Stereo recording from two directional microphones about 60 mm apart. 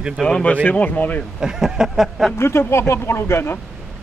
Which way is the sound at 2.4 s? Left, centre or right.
Left.